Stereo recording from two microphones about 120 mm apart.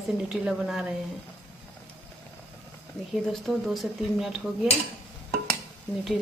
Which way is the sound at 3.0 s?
35° left (ahead or behind).